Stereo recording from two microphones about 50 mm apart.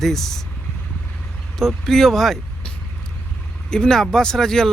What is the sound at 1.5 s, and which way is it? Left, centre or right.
Speech, centre.